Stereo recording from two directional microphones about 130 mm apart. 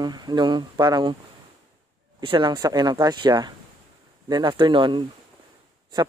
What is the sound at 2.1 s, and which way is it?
Speech, 35° right (ahead or behind).